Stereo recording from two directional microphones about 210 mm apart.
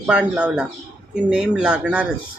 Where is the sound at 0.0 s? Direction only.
5° right (ahead or behind).